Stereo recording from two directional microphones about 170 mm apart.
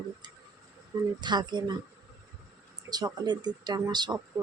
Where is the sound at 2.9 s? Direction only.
25° right (ahead or behind).